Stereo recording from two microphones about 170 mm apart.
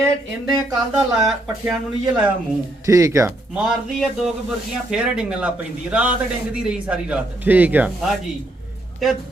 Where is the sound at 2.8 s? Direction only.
20° right (ahead or behind).